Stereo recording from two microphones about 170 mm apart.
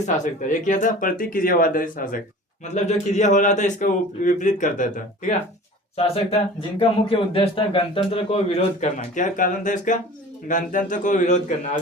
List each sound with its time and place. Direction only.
0.0 s a man's voice: 45° left (ahead or behind)
6.3 s speech: 35° left (ahead or behind)
9.1 s a man's voice: 50° left (ahead or behind)